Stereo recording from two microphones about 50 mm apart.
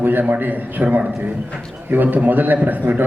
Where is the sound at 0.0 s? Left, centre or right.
Right.